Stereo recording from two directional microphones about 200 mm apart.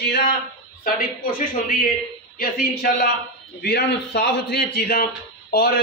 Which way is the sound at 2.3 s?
45° left (ahead or behind).